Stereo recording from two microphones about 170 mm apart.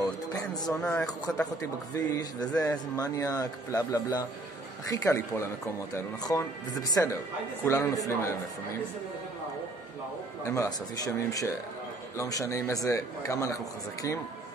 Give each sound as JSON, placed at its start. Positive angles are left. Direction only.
{"t": 0.0, "sound": "music", "side_deg": 20}
{"t": 0.7, "sound": "speech", "side_deg": 5}
{"t": 1.6, "sound": "speech", "side_deg": 20}
{"t": 10.4, "sound": "speech", "side_deg": 20}